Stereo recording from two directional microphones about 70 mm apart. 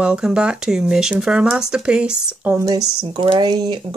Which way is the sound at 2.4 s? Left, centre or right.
Right.